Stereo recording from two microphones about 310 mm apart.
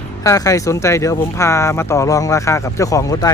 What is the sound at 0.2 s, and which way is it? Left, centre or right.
Speech, centre.